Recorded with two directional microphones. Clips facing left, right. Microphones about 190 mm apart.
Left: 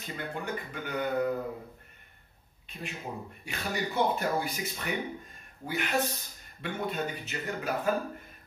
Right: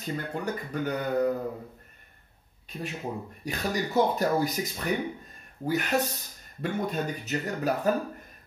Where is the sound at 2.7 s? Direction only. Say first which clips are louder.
Right 5 dB; 40° right (ahead or behind).